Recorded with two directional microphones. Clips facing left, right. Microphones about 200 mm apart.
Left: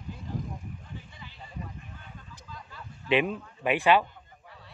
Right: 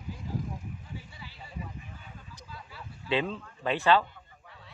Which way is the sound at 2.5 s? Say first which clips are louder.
Left 1 dB; 5° right (ahead or behind).